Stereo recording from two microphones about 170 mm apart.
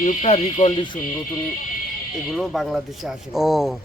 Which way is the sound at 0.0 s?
45° left (ahead or behind).